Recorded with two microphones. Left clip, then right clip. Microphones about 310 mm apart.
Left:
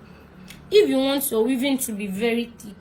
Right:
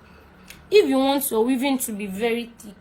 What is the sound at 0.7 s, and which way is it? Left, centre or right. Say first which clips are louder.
A woman's voice: even; centre.